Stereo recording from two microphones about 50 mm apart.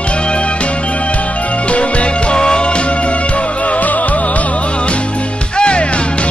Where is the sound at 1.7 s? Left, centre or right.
Left.